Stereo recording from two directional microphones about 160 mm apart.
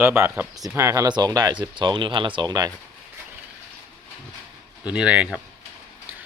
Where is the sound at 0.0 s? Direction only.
15° right (ahead or behind).